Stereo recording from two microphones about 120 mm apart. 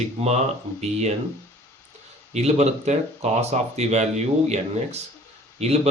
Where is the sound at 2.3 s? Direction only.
65° right (ahead or behind).